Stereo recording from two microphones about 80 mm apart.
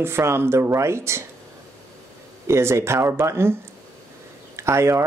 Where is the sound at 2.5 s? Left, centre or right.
Right.